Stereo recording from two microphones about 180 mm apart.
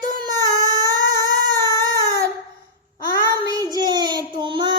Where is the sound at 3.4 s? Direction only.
20° right (ahead or behind).